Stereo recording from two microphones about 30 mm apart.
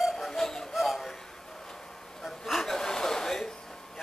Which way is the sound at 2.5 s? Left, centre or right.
Centre.